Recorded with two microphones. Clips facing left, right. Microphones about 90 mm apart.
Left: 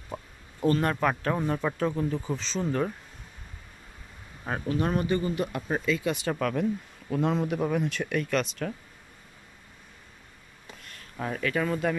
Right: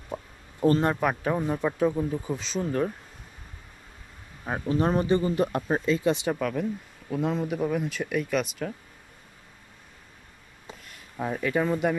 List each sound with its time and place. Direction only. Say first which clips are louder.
0.1 s a sound: right 2 dB; 20° right (ahead or behind)
0.7 s speech: right 3 dB; 25° right (ahead or behind)
0.9 s a man's voice: right 1 dB; 5° right (ahead or behind)
4.6 s speech: right 4 dB; 30° right (ahead or behind)
6.3 s speech: left 1 dB; centre (ahead or behind)
10.8 s speech: right 2 dB; 5° right (ahead or behind)